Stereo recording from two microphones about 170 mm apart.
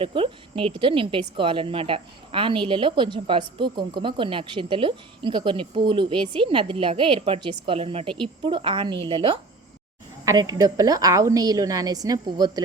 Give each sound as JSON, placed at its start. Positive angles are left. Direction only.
{"t": 0.0, "sound": "speech", "side_deg": -30}
{"t": 10.2, "sound": "speech", "side_deg": -20}